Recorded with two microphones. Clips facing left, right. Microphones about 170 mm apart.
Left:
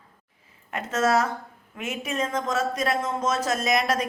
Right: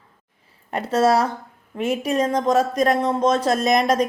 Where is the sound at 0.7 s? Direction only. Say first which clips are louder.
Right 5 dB; 30° right (ahead or behind).